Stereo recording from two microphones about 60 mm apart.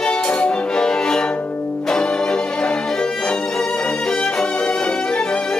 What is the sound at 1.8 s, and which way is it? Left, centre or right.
Music, centre.